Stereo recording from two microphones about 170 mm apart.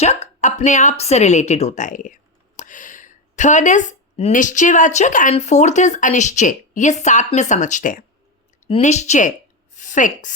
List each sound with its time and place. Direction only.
0.0 s a woman's voice: 40° left (ahead or behind)